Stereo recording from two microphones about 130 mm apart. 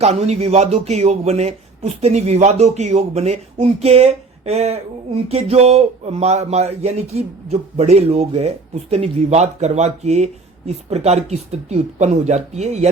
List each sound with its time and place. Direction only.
0.0 s speech: 55° right (ahead or behind)